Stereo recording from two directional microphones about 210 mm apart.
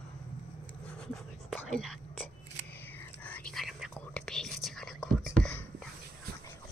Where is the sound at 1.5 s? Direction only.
Centre (ahead or behind).